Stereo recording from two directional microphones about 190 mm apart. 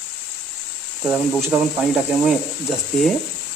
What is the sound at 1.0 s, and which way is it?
Speech, 5° right (ahead or behind).